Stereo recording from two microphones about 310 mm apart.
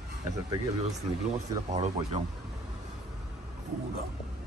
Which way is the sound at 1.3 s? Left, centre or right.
Right.